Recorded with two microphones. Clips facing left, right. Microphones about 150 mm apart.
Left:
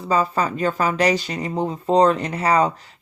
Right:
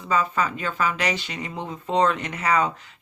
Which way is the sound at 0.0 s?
35° left (ahead or behind).